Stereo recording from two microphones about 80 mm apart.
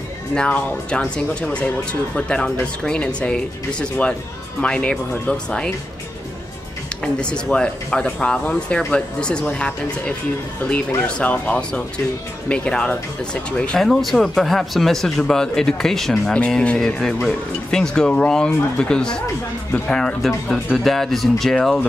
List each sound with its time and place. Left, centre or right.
0.3 s speech: centre
7.0 s speech: centre
13.7 s speech: centre